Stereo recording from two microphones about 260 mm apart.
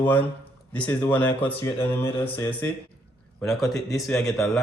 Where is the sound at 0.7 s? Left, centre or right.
Centre.